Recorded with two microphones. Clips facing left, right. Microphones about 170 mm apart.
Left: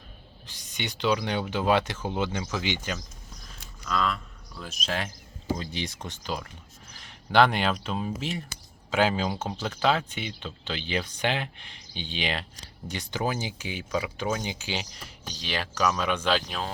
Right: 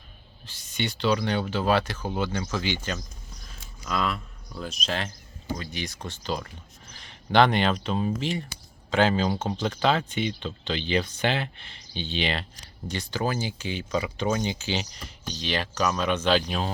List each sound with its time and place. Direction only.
0.4 s speech: 15° left (ahead or behind)
3.8 s speech: 5° right (ahead or behind)
4.6 s speech: 5° left (ahead or behind)
5.5 s speech: 25° left (ahead or behind)
6.2 s speech: 5° left (ahead or behind)